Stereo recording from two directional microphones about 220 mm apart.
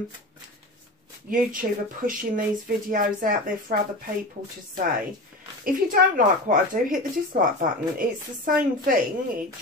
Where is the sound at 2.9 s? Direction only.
40° right (ahead or behind).